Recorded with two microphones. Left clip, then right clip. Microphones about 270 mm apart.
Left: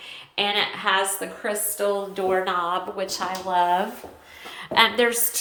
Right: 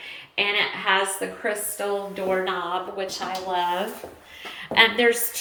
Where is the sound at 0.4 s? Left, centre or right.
Left.